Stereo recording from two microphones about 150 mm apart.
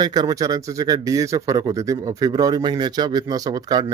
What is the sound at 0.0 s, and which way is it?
Speech, 25° right (ahead or behind).